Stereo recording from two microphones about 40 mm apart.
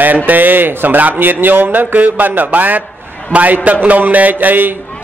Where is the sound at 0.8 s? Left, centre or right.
Right.